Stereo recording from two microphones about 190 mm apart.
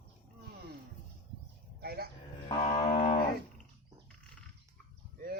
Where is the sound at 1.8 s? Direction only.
55° right (ahead or behind).